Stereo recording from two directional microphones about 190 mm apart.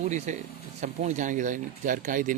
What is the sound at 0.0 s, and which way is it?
Speech, 40° right (ahead or behind).